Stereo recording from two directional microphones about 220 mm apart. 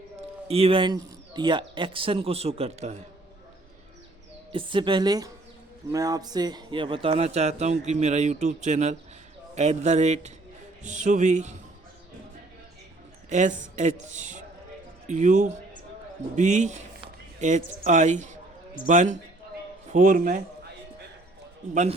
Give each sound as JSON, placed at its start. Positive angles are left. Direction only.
{"t": 0.4, "sound": "a man's voice", "side_deg": -25}
{"t": 4.5, "sound": "a man's voice", "side_deg": -20}
{"t": 13.3, "sound": "a woman's voice", "side_deg": -35}